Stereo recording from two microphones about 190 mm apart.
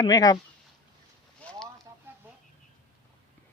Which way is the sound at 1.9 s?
15° right (ahead or behind).